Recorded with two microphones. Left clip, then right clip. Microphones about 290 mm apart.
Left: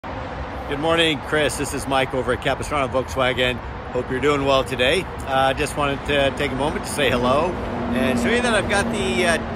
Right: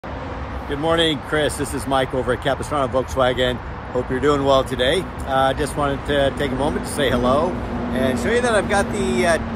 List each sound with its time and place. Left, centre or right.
0.8 s speech: centre